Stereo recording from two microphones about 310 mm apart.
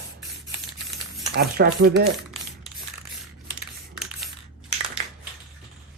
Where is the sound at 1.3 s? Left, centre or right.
Right.